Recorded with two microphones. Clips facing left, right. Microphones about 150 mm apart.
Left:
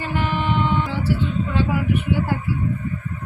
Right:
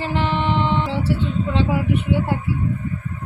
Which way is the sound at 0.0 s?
30° right (ahead or behind).